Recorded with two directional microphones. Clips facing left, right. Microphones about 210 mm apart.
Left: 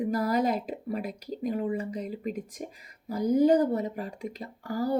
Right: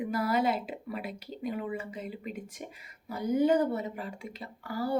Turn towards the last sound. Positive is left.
turn(degrees=40)  # may be behind; listen again after turning